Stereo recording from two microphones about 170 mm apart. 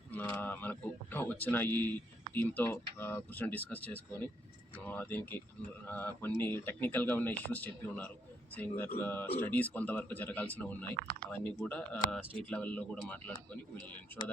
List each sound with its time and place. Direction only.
0.1 s speech: 10° left (ahead or behind)